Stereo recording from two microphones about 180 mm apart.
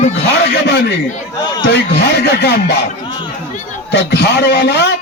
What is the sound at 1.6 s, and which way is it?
A man's voice, 70° left (ahead or behind).